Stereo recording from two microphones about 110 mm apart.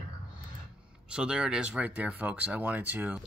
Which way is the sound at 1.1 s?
10° right (ahead or behind).